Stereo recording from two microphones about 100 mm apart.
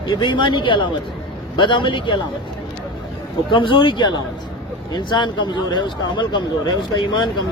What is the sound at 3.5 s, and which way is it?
Speech, 55° left (ahead or behind).